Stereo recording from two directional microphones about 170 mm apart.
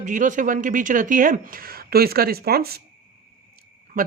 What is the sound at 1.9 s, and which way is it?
Speech, 65° right (ahead or behind).